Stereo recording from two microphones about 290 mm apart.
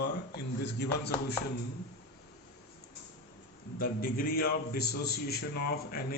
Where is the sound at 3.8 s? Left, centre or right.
Left.